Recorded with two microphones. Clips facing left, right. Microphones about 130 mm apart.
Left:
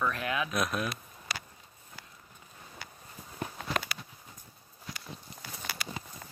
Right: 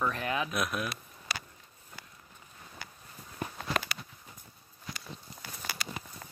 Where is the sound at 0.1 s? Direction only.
30° right (ahead or behind).